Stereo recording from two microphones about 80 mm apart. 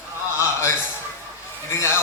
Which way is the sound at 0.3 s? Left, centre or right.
Left.